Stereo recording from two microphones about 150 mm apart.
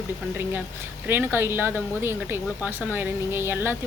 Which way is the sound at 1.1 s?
15° right (ahead or behind).